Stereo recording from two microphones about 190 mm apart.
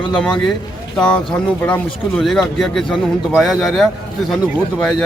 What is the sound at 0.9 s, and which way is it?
Speech, 5° left (ahead or behind).